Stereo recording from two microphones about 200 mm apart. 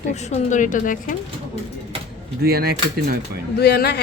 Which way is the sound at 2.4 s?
50° right (ahead or behind).